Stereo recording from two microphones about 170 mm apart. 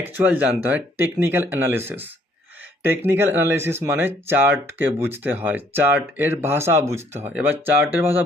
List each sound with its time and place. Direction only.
0.0 s speech: 10° right (ahead or behind)
7.1 s speech: 40° right (ahead or behind)
7.3 s speech: 10° right (ahead or behind)